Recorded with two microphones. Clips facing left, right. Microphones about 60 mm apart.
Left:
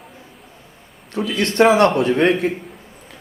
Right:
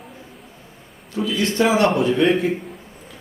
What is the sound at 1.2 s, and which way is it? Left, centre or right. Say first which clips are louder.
Speech: left 4 dB; left.